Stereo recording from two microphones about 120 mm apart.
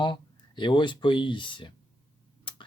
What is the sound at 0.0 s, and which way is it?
Speech, 40° left (ahead or behind).